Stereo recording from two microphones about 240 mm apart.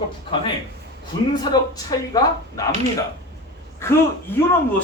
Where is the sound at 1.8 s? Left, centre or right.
Centre.